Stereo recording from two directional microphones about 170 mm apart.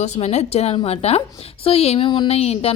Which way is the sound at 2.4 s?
40° left (ahead or behind).